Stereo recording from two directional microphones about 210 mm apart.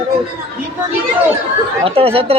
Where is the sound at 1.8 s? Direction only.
25° right (ahead or behind).